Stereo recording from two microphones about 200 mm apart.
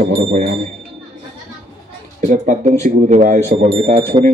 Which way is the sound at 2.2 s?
40° right (ahead or behind).